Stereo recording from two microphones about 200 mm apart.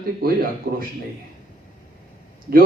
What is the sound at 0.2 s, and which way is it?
Speech, 45° right (ahead or behind).